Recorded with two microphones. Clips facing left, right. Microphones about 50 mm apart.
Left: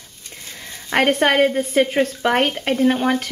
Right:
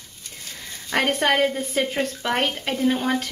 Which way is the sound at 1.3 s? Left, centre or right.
Centre.